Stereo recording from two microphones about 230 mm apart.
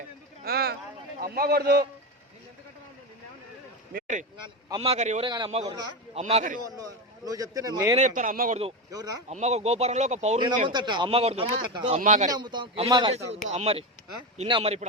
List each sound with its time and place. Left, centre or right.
0.4 s a man's voice: right
3.9 s speech: right
7.3 s speech: centre
7.9 s speech: right
8.9 s speech: centre
9.3 s speech: right
12.3 s speech: centre